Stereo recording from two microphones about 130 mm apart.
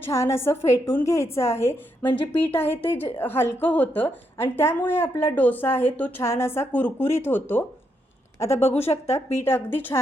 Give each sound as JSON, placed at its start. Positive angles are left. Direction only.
{"t": 0.0, "sound": "a woman's voice", "side_deg": 20}
{"t": 8.6, "sound": "a woman's voice", "side_deg": 55}
{"t": 9.1, "sound": "speech", "side_deg": 20}